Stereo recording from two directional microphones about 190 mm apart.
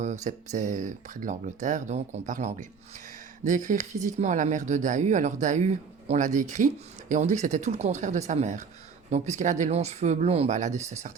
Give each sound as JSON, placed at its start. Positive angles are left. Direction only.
{"t": 0.0, "sound": "speech", "side_deg": -40}